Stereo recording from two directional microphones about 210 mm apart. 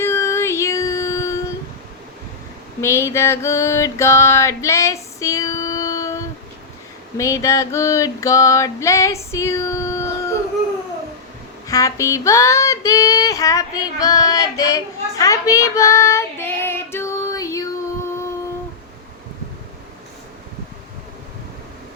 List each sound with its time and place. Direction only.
0.0 s child singing: 10° left (ahead or behind)
2.8 s music: 15° left (ahead or behind)
7.2 s child singing: 15° left (ahead or behind)
11.7 s child singing: 15° left (ahead or behind)